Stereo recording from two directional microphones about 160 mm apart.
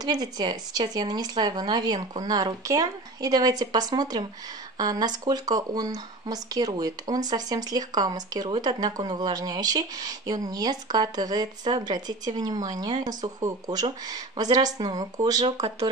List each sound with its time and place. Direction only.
0.0 s speech: 25° right (ahead or behind)